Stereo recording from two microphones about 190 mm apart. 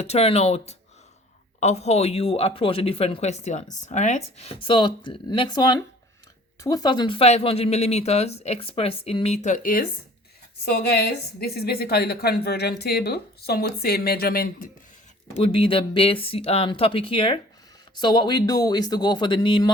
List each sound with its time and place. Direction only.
0.0 s a woman's voice: 35° left (ahead or behind)
10.7 s a woman's voice: 55° left (ahead or behind)
15.4 s speech: 30° left (ahead or behind)